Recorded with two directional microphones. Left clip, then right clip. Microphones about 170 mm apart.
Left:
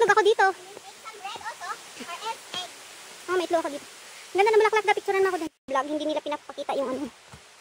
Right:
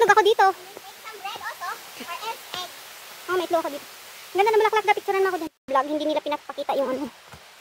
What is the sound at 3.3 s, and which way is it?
Speech, 20° left (ahead or behind).